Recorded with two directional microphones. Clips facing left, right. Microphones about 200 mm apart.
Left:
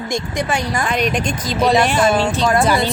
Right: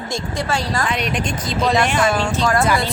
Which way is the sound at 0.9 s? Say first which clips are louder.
Left 4 dB; 45° left (ahead or behind).